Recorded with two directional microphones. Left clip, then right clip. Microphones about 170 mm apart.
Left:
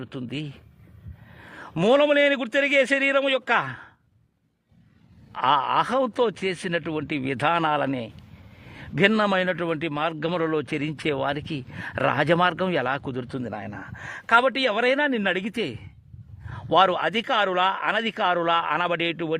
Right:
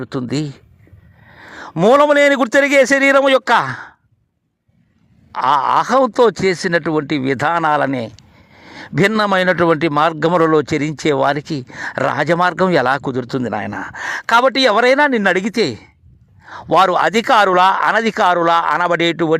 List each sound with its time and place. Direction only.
0.3 s a man's voice: 35° right (ahead or behind)
1.5 s a sound: 25° right (ahead or behind)
1.9 s a man's voice: 35° right (ahead or behind)
3.5 s speech: 30° right (ahead or behind)
5.3 s speech: 20° right (ahead or behind)
8.6 s a man's voice: 35° right (ahead or behind)